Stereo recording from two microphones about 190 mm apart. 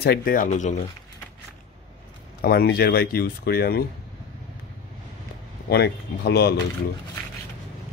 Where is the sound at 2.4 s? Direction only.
55° left (ahead or behind).